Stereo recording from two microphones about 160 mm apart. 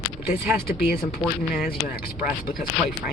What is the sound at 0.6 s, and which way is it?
Speech, 75° left (ahead or behind).